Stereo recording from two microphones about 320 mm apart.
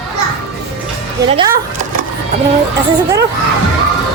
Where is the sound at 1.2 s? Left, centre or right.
Centre.